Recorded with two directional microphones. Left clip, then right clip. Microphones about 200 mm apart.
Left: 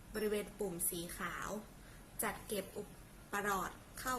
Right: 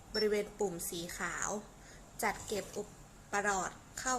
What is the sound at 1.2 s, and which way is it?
Speech, 10° right (ahead or behind).